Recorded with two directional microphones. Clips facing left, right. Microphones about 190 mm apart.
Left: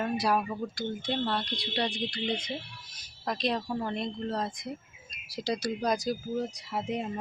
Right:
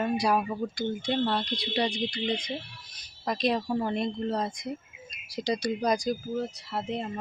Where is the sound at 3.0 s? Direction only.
Centre (ahead or behind).